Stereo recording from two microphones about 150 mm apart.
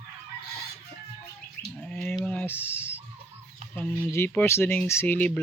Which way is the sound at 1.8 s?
10° left (ahead or behind).